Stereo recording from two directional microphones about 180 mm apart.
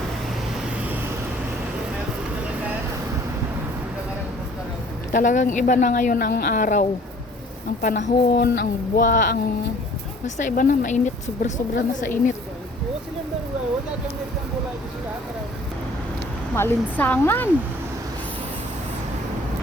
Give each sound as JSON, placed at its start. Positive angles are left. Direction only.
{"t": 5.1, "sound": "speech", "side_deg": 45}
{"t": 16.6, "sound": "speech", "side_deg": 10}